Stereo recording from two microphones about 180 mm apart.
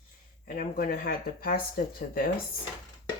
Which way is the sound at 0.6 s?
55° left (ahead or behind).